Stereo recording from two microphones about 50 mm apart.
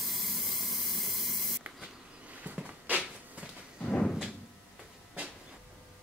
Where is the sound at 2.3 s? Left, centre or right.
Right.